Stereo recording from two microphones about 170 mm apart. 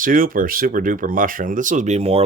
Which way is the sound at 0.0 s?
55° right (ahead or behind).